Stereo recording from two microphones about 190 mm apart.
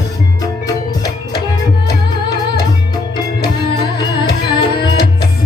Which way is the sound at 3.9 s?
25° left (ahead or behind).